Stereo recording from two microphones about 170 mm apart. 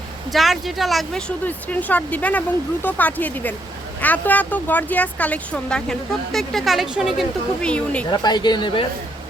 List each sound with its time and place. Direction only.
0.3 s speech: centre (ahead or behind)
8.1 s a woman's voice: 25° left (ahead or behind)